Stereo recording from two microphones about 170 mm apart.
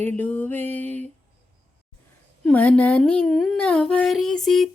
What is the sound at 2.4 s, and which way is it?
Speech, 10° left (ahead or behind).